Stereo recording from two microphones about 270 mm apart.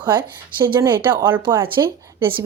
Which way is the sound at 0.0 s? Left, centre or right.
Centre.